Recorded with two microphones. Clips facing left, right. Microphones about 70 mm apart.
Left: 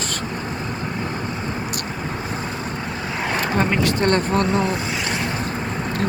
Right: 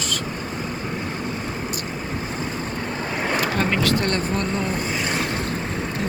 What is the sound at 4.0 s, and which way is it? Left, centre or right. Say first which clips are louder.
Speech: left 5 dB; left.